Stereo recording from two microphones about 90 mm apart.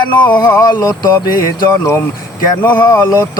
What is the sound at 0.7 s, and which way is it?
Music, 50° left (ahead or behind).